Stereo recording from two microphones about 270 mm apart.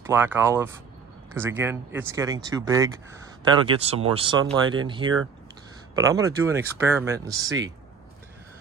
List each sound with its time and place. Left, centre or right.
0.1 s speech: centre